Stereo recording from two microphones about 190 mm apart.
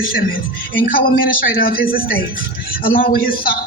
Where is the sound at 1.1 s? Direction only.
50° left (ahead or behind).